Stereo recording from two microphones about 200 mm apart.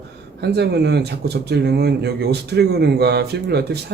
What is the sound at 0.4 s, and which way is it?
Speech, 55° right (ahead or behind).